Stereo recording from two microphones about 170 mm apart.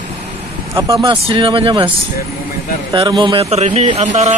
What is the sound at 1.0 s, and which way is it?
Speech, 30° right (ahead or behind).